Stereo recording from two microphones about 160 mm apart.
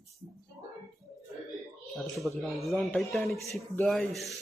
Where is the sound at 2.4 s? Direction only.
Centre (ahead or behind).